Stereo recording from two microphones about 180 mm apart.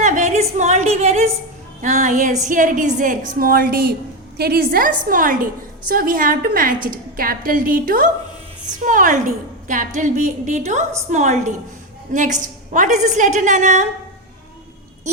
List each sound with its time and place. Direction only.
0.0 s a woman's voice: 40° right (ahead or behind)